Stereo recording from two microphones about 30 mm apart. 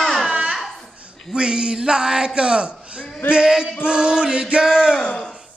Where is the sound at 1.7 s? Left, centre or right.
Right.